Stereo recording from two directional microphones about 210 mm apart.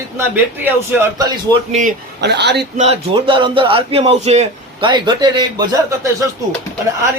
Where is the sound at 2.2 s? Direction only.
55° right (ahead or behind).